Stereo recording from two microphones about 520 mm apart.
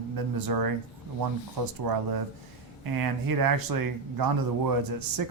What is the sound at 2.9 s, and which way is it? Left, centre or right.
A man's voice, right.